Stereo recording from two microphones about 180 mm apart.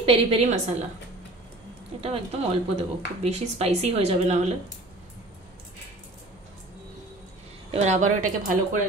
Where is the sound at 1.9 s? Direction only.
30° right (ahead or behind).